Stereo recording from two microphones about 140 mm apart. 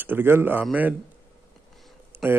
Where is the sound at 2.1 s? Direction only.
15° right (ahead or behind).